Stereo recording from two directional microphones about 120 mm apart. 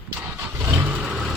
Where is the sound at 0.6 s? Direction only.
15° right (ahead or behind).